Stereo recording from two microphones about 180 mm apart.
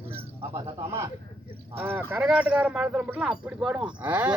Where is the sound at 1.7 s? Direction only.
10° right (ahead or behind).